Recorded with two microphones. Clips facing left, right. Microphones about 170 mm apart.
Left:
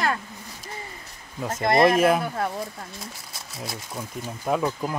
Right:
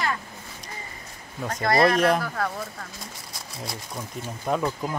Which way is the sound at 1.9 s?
5° left (ahead or behind).